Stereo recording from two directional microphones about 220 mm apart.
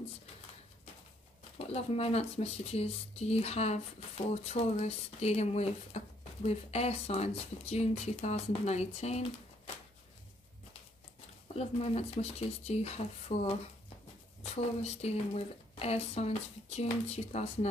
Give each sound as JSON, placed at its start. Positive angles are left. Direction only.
{"t": 1.7, "sound": "speech", "side_deg": 30}
{"t": 11.5, "sound": "speech", "side_deg": 30}